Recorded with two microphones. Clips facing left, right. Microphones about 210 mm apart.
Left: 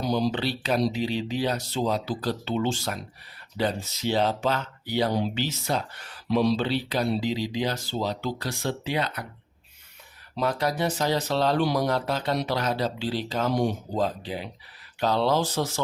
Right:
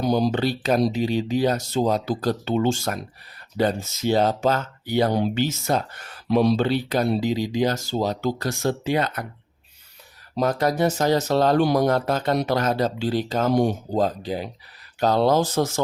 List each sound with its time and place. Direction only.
0.0 s speech: 50° right (ahead or behind)
10.3 s speech: 45° right (ahead or behind)